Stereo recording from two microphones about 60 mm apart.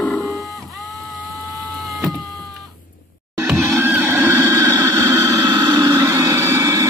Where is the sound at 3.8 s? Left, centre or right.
Right.